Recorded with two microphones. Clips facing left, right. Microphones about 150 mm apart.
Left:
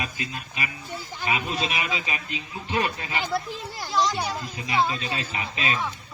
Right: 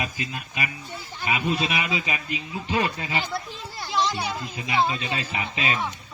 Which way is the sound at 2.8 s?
25° right (ahead or behind).